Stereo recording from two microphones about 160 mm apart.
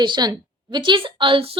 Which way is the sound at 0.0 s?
25° right (ahead or behind).